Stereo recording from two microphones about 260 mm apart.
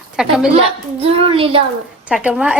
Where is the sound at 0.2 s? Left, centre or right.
Centre.